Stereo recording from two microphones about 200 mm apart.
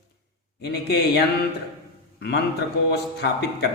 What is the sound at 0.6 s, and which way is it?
Speech, 55° left (ahead or behind).